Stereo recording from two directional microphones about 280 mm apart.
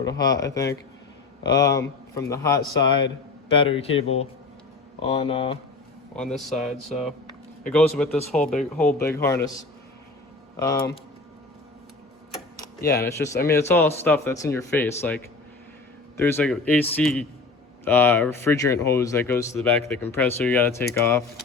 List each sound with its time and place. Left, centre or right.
0.0 s speech: centre
3.6 s speech: centre
5.0 s speech: left
6.1 s speech: centre
12.5 s speech: centre